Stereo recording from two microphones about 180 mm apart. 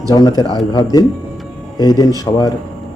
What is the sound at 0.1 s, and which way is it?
Speech, 20° left (ahead or behind).